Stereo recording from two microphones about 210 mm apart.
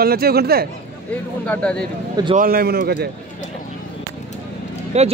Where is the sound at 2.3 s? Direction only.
45° right (ahead or behind).